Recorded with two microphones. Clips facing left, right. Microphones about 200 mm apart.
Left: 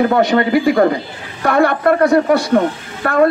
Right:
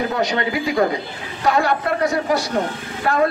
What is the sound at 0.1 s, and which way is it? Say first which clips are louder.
A man's voice: left 8 dB; 55° left (ahead or behind).